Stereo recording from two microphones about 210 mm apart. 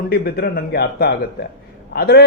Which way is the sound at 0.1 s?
50° left (ahead or behind).